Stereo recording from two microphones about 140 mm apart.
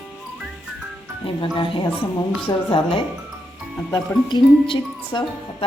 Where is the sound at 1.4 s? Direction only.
35° left (ahead or behind).